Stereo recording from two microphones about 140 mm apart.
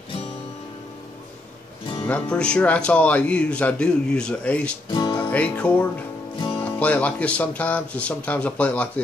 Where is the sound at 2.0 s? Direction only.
10° left (ahead or behind).